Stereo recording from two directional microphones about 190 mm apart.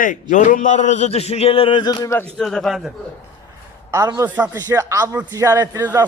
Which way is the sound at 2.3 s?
5° left (ahead or behind).